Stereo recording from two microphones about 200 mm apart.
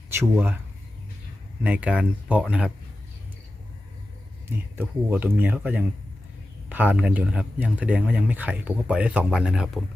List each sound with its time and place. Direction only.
0.1 s speech: 10° right (ahead or behind)
1.6 s speech: 5° right (ahead or behind)
4.4 s speech: 10° right (ahead or behind)